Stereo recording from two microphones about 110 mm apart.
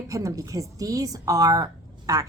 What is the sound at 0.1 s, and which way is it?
A woman's voice, 30° right (ahead or behind).